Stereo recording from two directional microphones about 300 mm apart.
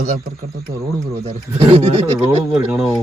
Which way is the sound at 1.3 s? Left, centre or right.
Right.